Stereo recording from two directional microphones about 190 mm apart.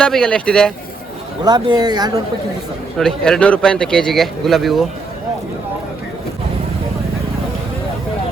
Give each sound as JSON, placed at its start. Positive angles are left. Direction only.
{"t": 0.0, "sound": "speech", "side_deg": 5}
{"t": 1.5, "sound": "speech", "side_deg": -20}
{"t": 3.0, "sound": "speech", "side_deg": 5}